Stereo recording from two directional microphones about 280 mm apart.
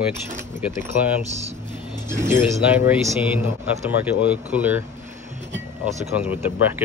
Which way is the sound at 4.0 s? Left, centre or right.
Centre.